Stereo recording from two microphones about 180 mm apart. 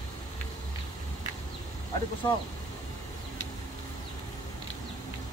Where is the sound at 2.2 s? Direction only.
25° left (ahead or behind).